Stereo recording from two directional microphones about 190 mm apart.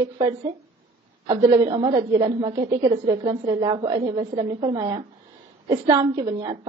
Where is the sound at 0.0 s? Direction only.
20° right (ahead or behind).